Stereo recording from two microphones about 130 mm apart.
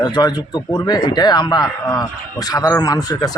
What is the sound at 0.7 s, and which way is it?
Speech, 35° left (ahead or behind).